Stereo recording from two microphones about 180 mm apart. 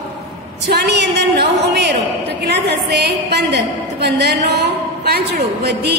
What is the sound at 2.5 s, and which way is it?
A woman's voice, 65° right (ahead or behind).